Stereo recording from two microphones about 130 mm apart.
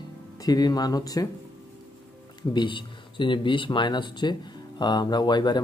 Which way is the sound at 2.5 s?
40° left (ahead or behind).